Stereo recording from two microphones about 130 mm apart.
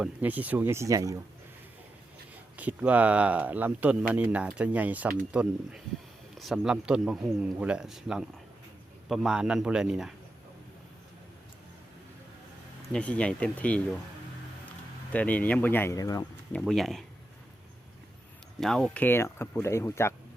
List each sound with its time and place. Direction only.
0.0 s speech: 10° right (ahead or behind)
2.3 s a man's voice: 10° right (ahead or behind)
12.9 s speech: 10° left (ahead or behind)
15.1 s speech: 10° left (ahead or behind)
16.0 s speech: 30° left (ahead or behind)
16.5 s a man's voice: 5° left (ahead or behind)
18.6 s speech: 5° left (ahead or behind)